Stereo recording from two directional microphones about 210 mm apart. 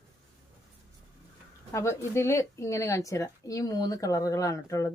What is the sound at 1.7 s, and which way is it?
A woman's voice, 10° left (ahead or behind).